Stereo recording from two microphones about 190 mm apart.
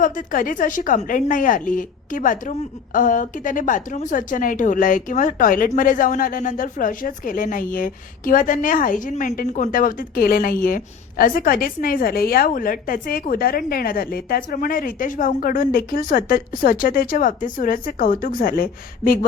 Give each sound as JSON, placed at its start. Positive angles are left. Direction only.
{"t": 0.0, "sound": "a woman's voice", "side_deg": 45}